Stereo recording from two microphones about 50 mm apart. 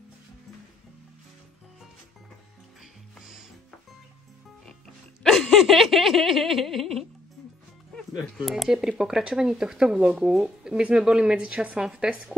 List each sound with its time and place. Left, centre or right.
3.2 s music: centre
5.2 s a sound: centre
8.2 s speech: centre
9.9 s a woman's voice: right